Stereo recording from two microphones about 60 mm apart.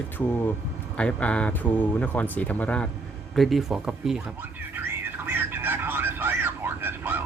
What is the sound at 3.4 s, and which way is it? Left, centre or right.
Speech, centre.